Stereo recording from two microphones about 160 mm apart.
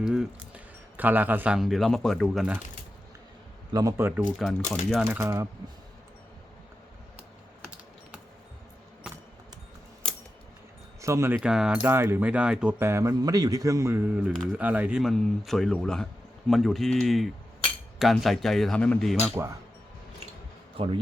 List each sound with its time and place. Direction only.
0.0 s speech: 5° right (ahead or behind)
3.7 s speech: 20° right (ahead or behind)
4.3 s a man's voice: centre (ahead or behind)
5.2 s speech: 20° right (ahead or behind)
10.0 s a sound: 5° left (ahead or behind)
11.0 s speech: 15° right (ahead or behind)
11.3 s a man's voice: 5° right (ahead or behind)
19.4 s speech: 20° right (ahead or behind)
20.8 s speech: 35° right (ahead or behind)